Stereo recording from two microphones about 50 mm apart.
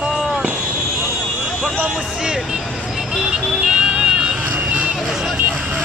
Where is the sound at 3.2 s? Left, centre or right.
Centre.